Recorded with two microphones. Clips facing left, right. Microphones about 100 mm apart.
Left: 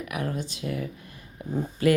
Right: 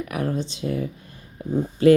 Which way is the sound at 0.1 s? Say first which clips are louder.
Right 4 dB; 35° right (ahead or behind).